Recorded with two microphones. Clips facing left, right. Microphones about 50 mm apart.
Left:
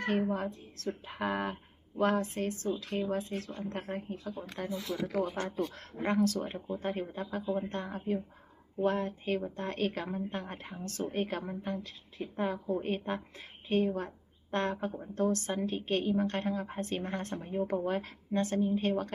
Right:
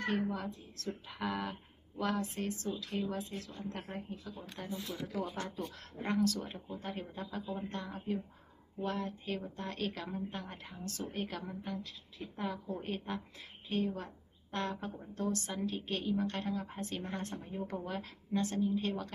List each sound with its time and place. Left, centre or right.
0.1 s a woman's voice: left
4.1 s speech: left
4.7 s speech: left
5.1 s speech: left
5.7 s a woman's voice: left
7.4 s speech: centre
7.7 s a woman's voice: left
12.5 s speech: centre
12.8 s a woman's voice: left